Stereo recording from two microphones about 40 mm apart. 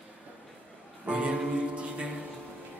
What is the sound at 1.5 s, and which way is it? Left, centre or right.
A capella, right.